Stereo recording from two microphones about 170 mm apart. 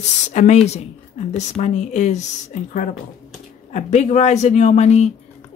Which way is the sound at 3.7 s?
45° left (ahead or behind).